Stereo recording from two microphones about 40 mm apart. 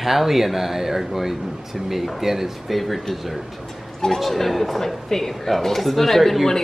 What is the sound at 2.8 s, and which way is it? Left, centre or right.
Speech, centre.